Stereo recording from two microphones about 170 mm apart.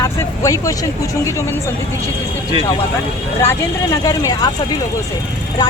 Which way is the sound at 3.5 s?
20° left (ahead or behind).